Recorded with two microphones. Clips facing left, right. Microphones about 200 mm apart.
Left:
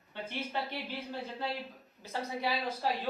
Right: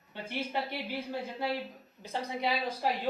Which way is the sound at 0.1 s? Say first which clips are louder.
Right 2 dB; 10° right (ahead or behind).